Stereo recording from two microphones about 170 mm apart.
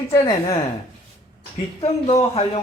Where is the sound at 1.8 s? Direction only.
35° left (ahead or behind).